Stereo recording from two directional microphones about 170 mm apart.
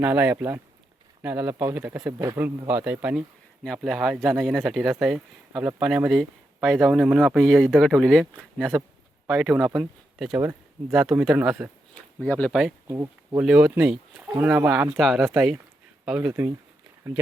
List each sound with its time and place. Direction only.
0.0 s speech: 10° right (ahead or behind)
3.6 s speech: centre (ahead or behind)
12.2 s speech: 10° left (ahead or behind)
12.9 s speech: 20° right (ahead or behind)
13.4 s speech: 5° right (ahead or behind)